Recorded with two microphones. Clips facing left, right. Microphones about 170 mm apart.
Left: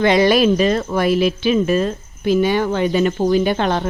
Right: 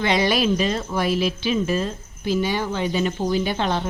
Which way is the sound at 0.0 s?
50° left (ahead or behind).